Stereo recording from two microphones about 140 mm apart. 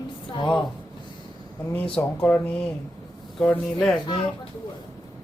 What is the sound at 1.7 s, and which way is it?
Speech, 10° left (ahead or behind).